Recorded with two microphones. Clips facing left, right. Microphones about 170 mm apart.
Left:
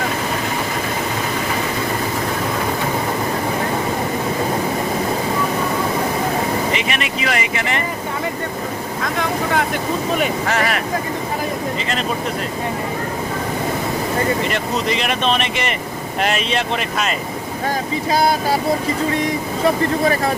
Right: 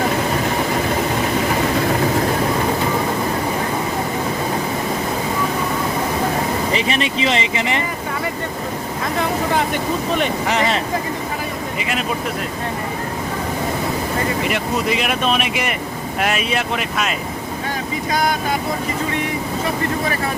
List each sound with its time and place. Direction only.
6.7 s speech: 30° right (ahead or behind)
10.4 s speech: 20° right (ahead or behind)
14.4 s speech: 5° right (ahead or behind)
18.1 s speech: 30° left (ahead or behind)
19.6 s speech: 35° left (ahead or behind)